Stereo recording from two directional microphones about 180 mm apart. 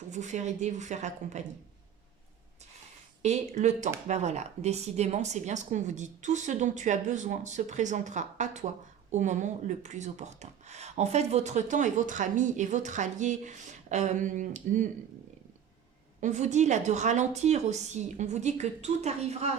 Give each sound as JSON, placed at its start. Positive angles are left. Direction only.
{"t": 0.1, "sound": "a woman's voice", "side_deg": -40}
{"t": 3.2, "sound": "a woman's voice", "side_deg": -40}
{"t": 16.2, "sound": "a woman's voice", "side_deg": -40}